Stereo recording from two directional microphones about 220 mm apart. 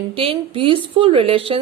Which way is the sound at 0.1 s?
25° right (ahead or behind).